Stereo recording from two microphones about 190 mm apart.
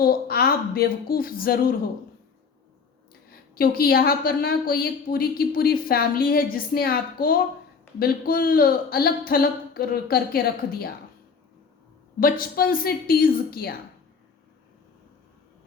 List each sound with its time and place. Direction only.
0.0 s a woman's voice: 55° left (ahead or behind)
3.2 s a woman's voice: 50° left (ahead or behind)
12.2 s a woman's voice: 50° left (ahead or behind)